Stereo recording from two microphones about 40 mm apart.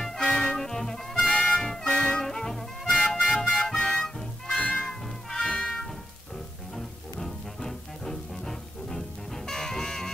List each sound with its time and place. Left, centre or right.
0.2 s music: centre
4.6 s music: left
4.8 s music: centre
7.2 s music: centre